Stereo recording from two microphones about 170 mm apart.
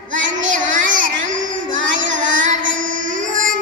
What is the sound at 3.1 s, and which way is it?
Music, 50° right (ahead or behind).